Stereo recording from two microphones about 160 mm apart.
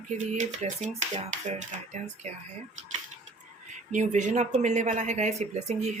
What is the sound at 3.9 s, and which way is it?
Speech, 50° right (ahead or behind).